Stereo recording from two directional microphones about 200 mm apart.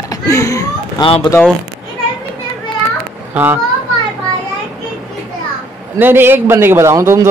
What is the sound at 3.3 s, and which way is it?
Speech, 10° right (ahead or behind).